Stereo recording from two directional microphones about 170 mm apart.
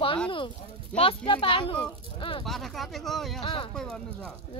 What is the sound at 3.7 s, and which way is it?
Speech, 5° left (ahead or behind).